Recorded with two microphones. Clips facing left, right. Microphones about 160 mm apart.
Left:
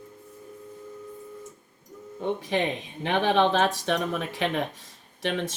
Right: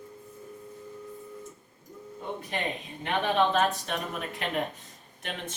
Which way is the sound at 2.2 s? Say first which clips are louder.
Left 7 dB; 90° left.